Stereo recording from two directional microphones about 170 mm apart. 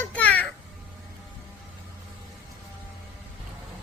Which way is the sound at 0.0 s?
10° left (ahead or behind).